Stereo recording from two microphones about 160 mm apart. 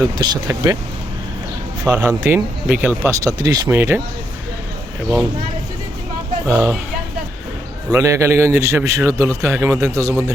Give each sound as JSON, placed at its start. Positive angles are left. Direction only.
{"t": 0.0, "sound": "speech", "side_deg": -20}
{"t": 1.8, "sound": "a man's voice", "side_deg": -15}
{"t": 6.5, "sound": "a man's voice", "side_deg": -15}
{"t": 7.9, "sound": "a man's voice", "side_deg": -20}